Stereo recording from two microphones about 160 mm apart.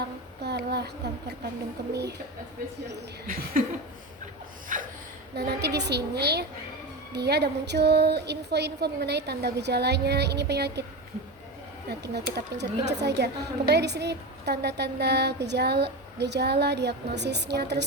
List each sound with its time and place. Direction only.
0.4 s a sound: 90° right
1.9 s speech: 90° right
2.9 s speech: 65° right (ahead or behind)
4.7 s a sound: 50° right (ahead or behind)
5.3 s speech: 90° right
11.9 s speech: 85° right